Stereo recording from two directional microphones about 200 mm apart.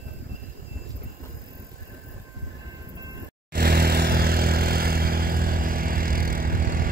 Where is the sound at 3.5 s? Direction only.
50° right (ahead or behind).